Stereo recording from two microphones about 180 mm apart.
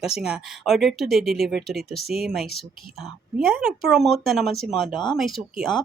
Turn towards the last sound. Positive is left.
turn(degrees=0)  # may be behind; listen again after turning